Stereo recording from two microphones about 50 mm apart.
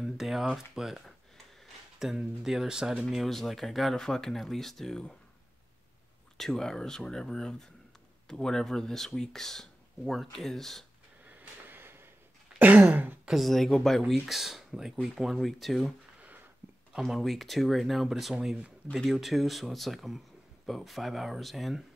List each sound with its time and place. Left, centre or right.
0.0 s a sound: centre
0.7 s speech: centre
3.3 s speech: centre
6.3 s speech: centre
11.2 s a sound: right
11.8 s a sound: right
12.5 s a sound: right
13.3 s speech: centre
14.2 s speech: centre
16.9 s speech: centre
18.4 s speech: centre
19.0 s speech: centre